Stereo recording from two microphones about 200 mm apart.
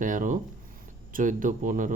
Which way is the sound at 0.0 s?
40° right (ahead or behind).